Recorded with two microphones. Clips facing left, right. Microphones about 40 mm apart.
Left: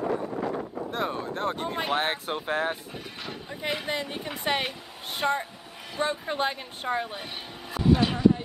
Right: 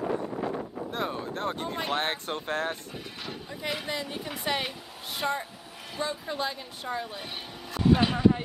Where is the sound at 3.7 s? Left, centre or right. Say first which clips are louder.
Left 3 dB; centre.